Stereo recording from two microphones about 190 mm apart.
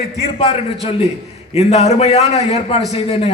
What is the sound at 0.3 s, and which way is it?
A man's voice, 30° left (ahead or behind).